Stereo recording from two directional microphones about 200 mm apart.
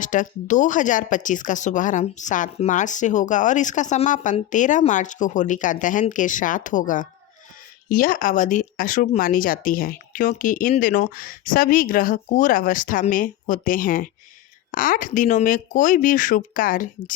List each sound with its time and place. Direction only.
0.0 s speech: 40° left (ahead or behind)